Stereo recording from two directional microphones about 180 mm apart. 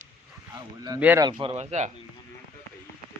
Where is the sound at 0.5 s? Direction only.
20° right (ahead or behind).